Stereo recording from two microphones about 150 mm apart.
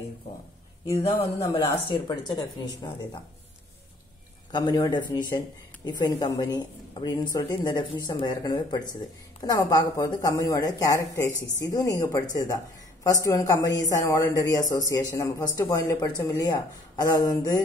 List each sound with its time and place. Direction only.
1.4 s speech: 25° left (ahead or behind)
4.5 s speech: 25° left (ahead or behind)